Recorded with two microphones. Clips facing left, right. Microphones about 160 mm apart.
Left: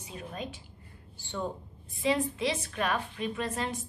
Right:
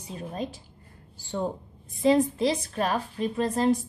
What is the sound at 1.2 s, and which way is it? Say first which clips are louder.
A woman's voice: right 5 dB; 40° right (ahead or behind).